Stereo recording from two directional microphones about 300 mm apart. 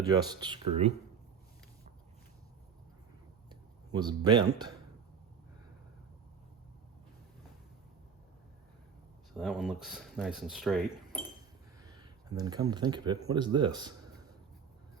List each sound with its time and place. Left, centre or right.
0.0 s speech: centre
3.5 s speech: centre
9.3 s speech: centre
11.9 s speech: centre